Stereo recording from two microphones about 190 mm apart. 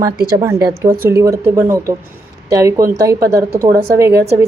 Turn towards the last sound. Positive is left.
turn(degrees=-15)  # may be behind; listen again after turning